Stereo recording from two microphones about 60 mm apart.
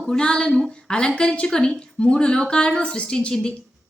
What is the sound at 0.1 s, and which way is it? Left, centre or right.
A woman's voice, centre.